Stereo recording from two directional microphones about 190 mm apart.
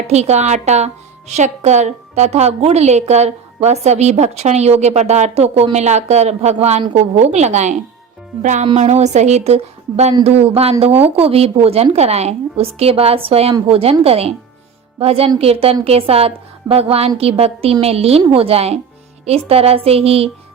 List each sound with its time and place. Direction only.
0.1 s a woman's voice: 35° right (ahead or behind)